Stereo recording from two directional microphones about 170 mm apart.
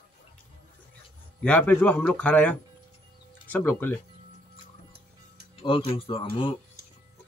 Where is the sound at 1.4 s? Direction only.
10° left (ahead or behind).